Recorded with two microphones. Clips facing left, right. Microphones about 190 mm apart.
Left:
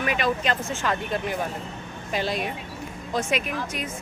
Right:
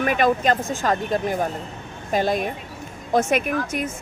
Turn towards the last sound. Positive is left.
turn(degrees=-50)  # may be behind; listen again after turning